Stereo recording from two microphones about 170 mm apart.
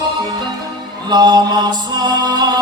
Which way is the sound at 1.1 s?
25° right (ahead or behind).